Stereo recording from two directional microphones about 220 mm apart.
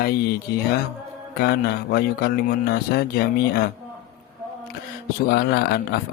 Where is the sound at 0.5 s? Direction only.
45° left (ahead or behind).